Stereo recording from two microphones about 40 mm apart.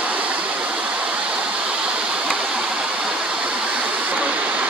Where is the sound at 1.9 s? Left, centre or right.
Right.